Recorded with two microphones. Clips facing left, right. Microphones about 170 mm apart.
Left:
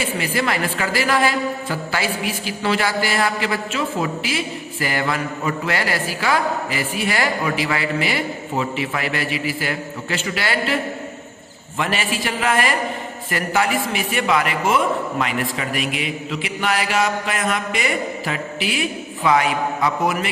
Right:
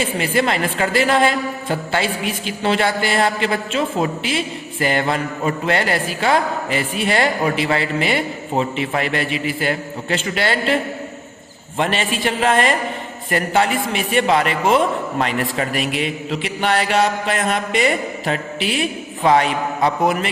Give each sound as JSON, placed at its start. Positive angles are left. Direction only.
{"t": 0.0, "sound": "a man's voice", "side_deg": -25}
{"t": 11.8, "sound": "a man's voice", "side_deg": -25}